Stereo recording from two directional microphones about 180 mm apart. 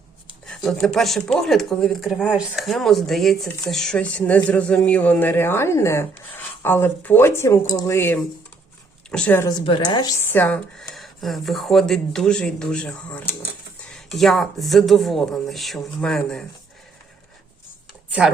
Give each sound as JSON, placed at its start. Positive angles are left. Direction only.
{"t": 0.4, "sound": "speech", "side_deg": 5}
{"t": 9.5, "sound": "a woman's voice", "side_deg": 25}
{"t": 10.3, "sound": "speech", "side_deg": 10}
{"t": 18.2, "sound": "speech", "side_deg": -5}